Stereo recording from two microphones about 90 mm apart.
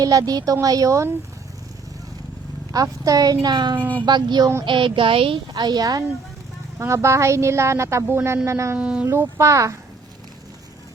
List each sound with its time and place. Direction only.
0.0 s a woman's voice: 45° right (ahead or behind)
2.7 s a woman's voice: 40° right (ahead or behind)
3.4 s speech: 55° right (ahead or behind)
4.6 s speech: 65° right (ahead or behind); by 5.4 s 85° right
5.5 s speech: 45° right (ahead or behind)
6.7 s a woman's voice: 30° right (ahead or behind)
8.8 s speech: 10° right (ahead or behind)
9.0 s a woman's voice: 30° right (ahead or behind)